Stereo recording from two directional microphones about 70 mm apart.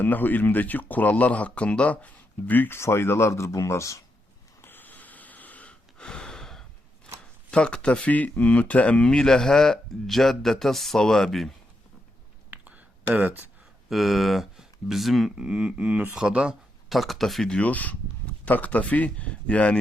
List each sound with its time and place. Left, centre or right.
0.0 s speech: left
2.7 s speech: left
4.6 s snort: left; by 6.7 s centre
7.5 s speech: centre
12.5 s a sound: right
13.1 s speech: right
13.9 s speech: centre
15.4 s a sound: centre
16.9 s speech: centre
17.5 s speech: left